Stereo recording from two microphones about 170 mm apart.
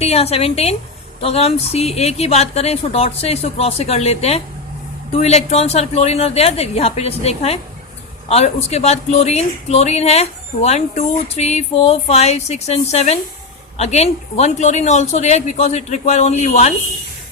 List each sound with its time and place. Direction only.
0.0 s speech: 40° left (ahead or behind)